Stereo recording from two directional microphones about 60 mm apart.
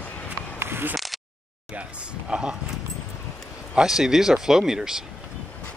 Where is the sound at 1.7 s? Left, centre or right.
Centre.